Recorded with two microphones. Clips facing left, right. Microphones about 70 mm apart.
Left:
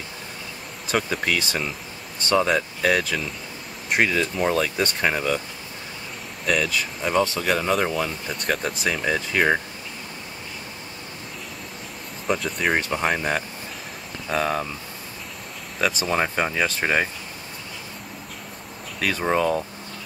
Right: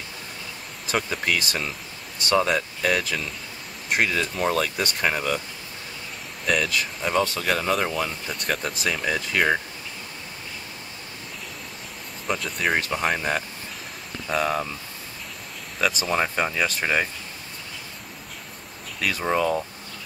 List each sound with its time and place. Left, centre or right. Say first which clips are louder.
0.8 s speech: left 2 dB; centre
6.4 s speech: left 1 dB; centre
12.3 s speech: left 2 dB; centre
15.8 s speech: left 1 dB; centre
18.9 s speech: left 1 dB; centre